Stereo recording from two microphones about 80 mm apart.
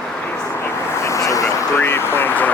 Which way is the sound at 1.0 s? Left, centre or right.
Left.